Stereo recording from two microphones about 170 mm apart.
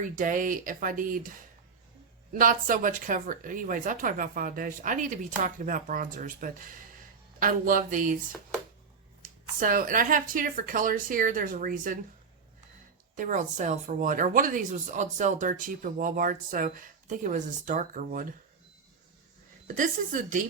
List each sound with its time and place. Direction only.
0.0 s speech: 50° right (ahead or behind)
2.3 s speech: 55° right (ahead or behind)
9.6 s speech: 55° right (ahead or behind)
13.1 s speech: 50° right (ahead or behind)
19.6 s speech: 50° right (ahead or behind)